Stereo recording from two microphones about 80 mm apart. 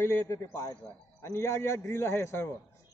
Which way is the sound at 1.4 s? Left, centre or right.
Left.